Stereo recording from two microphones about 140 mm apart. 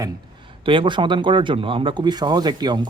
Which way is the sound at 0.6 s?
35° right (ahead or behind).